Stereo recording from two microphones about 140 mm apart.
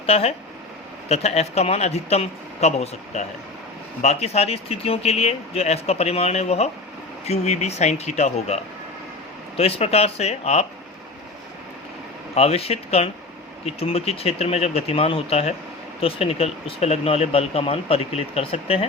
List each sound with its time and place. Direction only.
0.0 s speech: 45° left (ahead or behind)
12.3 s speech: 45° left (ahead or behind)